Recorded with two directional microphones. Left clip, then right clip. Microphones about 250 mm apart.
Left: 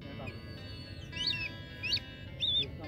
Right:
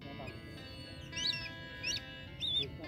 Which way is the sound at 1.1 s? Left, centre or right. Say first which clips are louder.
Left 2 dB; centre.